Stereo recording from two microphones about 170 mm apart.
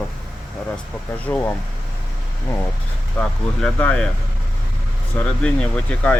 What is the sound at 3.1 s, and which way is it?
Speech, 10° left (ahead or behind).